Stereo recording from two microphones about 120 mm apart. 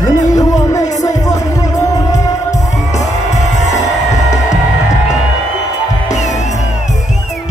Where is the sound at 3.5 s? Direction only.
75° left (ahead or behind).